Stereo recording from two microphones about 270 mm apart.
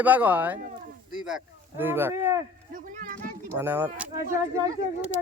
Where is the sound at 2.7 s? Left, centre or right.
Right.